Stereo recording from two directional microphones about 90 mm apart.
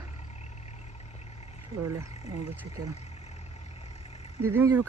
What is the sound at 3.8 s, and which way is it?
Vehicle, 90° left.